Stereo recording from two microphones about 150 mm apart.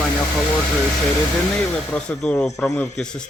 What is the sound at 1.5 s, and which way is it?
Speech, 5° left (ahead or behind).